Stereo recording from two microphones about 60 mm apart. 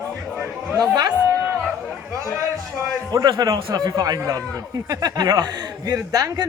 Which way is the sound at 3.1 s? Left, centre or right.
Right.